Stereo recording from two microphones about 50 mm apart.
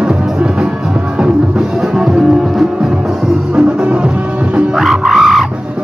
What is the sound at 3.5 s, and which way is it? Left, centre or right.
Music, right.